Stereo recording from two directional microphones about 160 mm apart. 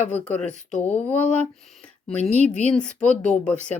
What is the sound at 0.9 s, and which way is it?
Speech, 10° left (ahead or behind).